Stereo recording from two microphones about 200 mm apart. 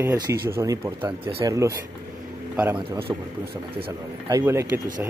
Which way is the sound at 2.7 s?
25° right (ahead or behind).